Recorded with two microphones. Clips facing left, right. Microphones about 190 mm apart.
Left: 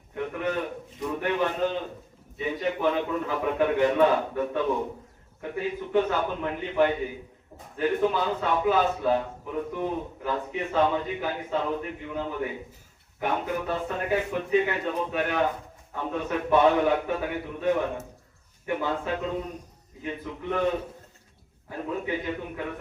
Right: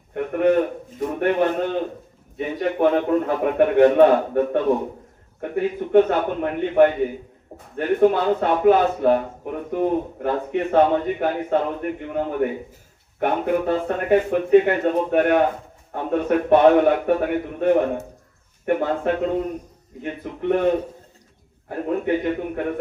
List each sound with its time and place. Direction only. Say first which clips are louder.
0.1 s a sound: right 10 dB; 55° right (ahead or behind)
2.6 s speech: right 7 dB; 55° right (ahead or behind)
21.7 s speech: right 8 dB; 55° right (ahead or behind)